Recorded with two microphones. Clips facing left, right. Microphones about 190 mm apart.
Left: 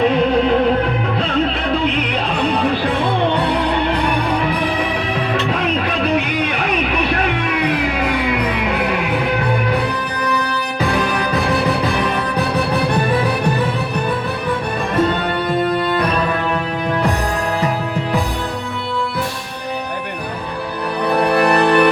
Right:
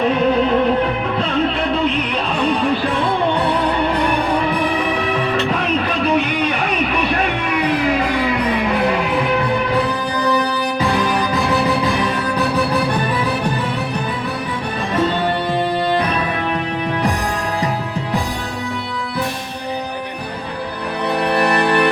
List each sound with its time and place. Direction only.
10.2 s music: 60° left (ahead or behind)
21.1 s music: 55° left (ahead or behind)